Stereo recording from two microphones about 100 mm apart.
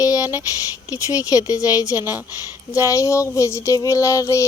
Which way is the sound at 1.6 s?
35° left (ahead or behind).